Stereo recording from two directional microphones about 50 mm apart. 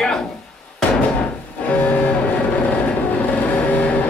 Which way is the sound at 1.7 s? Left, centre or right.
Left.